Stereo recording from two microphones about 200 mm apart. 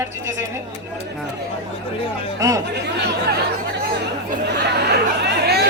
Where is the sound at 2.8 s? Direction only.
55° right (ahead or behind).